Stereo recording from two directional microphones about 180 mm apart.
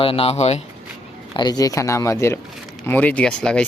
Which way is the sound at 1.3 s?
20° left (ahead or behind).